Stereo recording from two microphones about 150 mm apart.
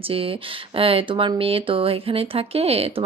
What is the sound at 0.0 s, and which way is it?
A woman's voice, 40° right (ahead or behind).